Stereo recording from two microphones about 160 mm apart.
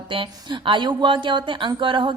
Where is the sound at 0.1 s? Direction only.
30° right (ahead or behind).